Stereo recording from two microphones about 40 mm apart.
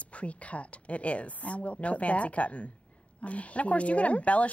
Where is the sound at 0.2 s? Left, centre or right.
Left.